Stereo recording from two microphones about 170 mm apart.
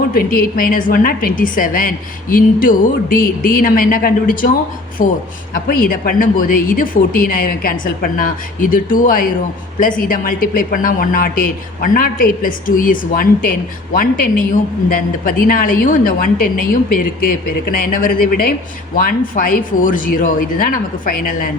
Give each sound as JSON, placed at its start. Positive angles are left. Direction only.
{"t": 0.1, "sound": "a woman's voice", "side_deg": 55}